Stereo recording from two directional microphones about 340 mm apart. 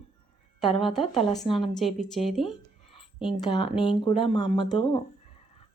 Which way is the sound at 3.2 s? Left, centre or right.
Centre.